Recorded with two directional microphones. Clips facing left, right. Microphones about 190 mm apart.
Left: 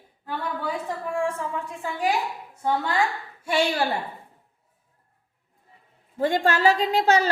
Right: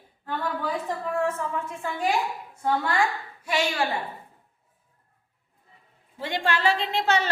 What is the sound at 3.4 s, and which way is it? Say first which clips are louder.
Speech: left 3 dB; 30° left (ahead or behind).